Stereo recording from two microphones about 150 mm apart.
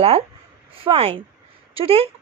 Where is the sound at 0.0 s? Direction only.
40° right (ahead or behind).